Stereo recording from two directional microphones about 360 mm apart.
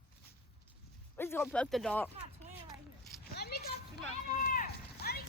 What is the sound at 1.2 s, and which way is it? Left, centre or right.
Speech, centre.